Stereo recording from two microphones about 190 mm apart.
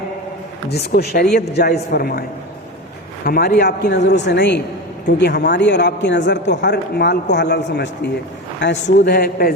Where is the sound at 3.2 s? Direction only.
55° left (ahead or behind).